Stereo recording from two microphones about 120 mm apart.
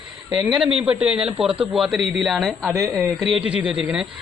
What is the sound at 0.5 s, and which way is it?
Speech, 5° right (ahead or behind).